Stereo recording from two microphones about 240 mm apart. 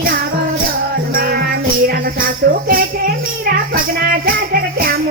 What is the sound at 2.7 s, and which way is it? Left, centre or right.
Music, right.